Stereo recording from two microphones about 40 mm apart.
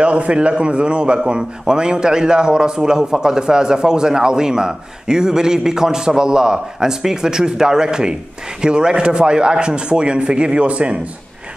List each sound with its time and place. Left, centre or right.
0.0 s a man's voice: right